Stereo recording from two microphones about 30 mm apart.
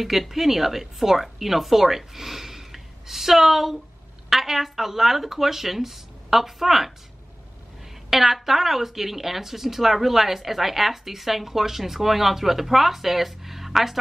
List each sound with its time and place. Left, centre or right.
0.0 s speech: centre
8.1 s speech: centre